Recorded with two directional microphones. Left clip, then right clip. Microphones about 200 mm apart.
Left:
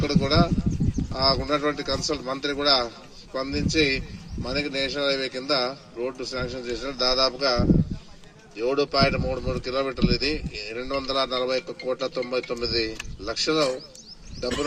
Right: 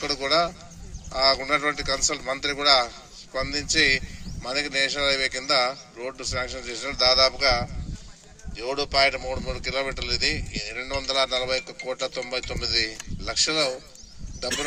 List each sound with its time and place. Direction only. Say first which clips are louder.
0.0 s speech: even; 15° left (ahead or behind)